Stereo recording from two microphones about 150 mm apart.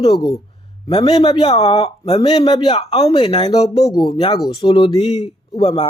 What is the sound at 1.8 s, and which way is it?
Speech, 40° left (ahead or behind).